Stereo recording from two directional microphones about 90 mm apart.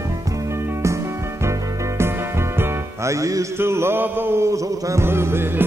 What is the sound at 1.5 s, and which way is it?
Music, 30° right (ahead or behind).